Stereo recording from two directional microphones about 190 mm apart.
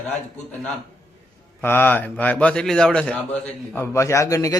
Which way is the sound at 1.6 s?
10° left (ahead or behind).